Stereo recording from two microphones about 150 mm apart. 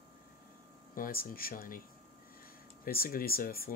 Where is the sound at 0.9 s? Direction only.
75° left (ahead or behind).